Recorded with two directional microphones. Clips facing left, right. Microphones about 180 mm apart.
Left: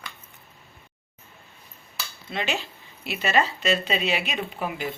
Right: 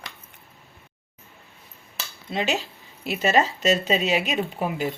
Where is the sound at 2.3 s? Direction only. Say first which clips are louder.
Right 3 dB; 40° right (ahead or behind).